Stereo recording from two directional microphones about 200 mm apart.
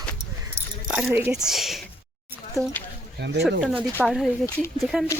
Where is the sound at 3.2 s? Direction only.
55° right (ahead or behind).